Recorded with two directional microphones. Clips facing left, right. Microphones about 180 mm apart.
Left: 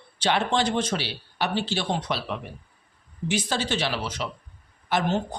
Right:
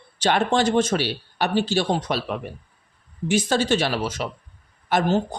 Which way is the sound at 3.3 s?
45° right (ahead or behind).